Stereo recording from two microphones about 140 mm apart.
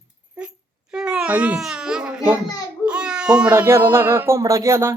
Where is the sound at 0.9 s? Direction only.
5° right (ahead or behind).